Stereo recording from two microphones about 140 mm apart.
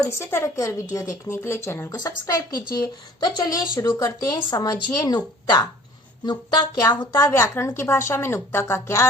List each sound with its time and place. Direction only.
0.0 s speech: 15° left (ahead or behind)
7.1 s a woman's voice: 20° left (ahead or behind)